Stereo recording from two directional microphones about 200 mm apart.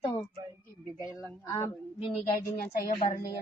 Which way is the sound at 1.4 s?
15° left (ahead or behind).